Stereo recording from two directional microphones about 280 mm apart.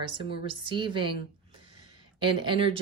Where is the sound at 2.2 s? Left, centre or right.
Centre.